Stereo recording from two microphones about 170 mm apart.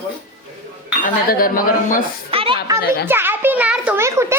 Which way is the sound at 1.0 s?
55° left (ahead or behind).